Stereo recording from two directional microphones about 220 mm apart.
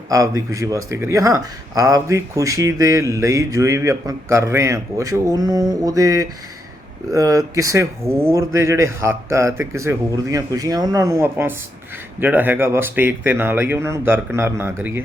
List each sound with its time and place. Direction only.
0.1 s speech: 15° right (ahead or behind)